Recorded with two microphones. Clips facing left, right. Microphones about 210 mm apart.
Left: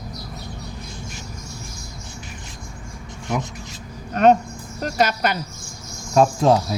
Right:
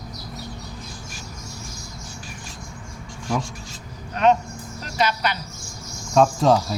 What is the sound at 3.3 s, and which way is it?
Speech, 20° left (ahead or behind).